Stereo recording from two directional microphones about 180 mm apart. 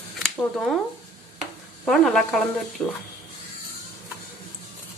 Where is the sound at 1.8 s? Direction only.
Centre (ahead or behind).